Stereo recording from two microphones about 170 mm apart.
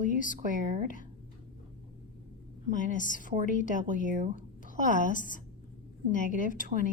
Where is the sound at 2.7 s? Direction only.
50° left (ahead or behind).